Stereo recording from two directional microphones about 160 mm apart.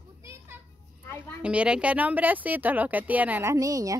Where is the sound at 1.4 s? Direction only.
5° right (ahead or behind).